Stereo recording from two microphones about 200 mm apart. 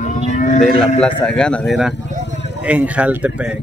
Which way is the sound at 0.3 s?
35° left (ahead or behind).